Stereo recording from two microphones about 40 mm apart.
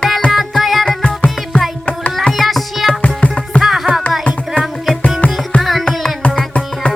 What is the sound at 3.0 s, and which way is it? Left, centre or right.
Music, left.